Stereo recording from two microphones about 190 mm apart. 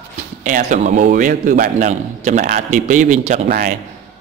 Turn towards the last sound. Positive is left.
turn(degrees=-45)  # may be behind; listen again after turning